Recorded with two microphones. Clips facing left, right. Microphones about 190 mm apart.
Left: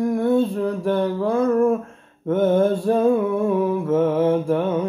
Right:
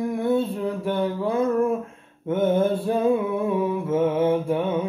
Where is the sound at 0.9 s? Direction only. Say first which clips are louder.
Left 3 dB; 5° right (ahead or behind).